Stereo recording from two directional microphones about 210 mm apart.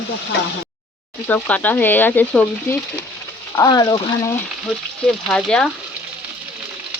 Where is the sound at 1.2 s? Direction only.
5° left (ahead or behind).